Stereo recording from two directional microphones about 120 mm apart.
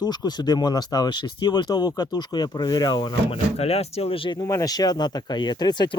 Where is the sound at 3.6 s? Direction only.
60° left (ahead or behind).